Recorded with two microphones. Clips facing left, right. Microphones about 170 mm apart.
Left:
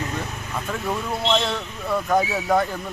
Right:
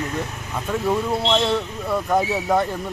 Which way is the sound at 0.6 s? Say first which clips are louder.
Right 5 dB; centre (ahead or behind).